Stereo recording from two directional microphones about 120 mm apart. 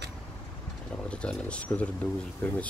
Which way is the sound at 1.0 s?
10° left (ahead or behind).